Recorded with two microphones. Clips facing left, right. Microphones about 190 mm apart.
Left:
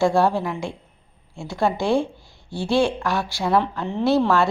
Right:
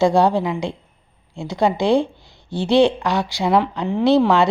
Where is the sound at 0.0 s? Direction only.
20° right (ahead or behind).